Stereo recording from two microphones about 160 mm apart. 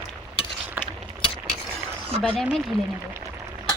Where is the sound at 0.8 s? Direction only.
10° right (ahead or behind).